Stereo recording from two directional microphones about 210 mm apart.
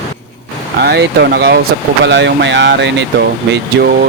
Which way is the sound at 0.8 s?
50° right (ahead or behind).